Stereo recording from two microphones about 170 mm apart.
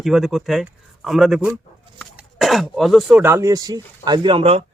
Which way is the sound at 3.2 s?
15° right (ahead or behind).